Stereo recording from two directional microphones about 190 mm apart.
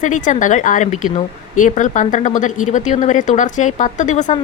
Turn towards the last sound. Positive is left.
turn(degrees=40)  # may be behind; listen again after turning